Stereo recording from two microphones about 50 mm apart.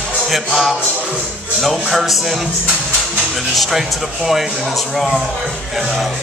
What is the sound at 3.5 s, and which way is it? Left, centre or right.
Speech, centre.